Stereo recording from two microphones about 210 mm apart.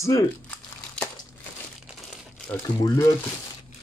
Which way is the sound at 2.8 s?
15° left (ahead or behind).